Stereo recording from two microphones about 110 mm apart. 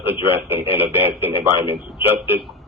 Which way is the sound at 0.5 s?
20° right (ahead or behind).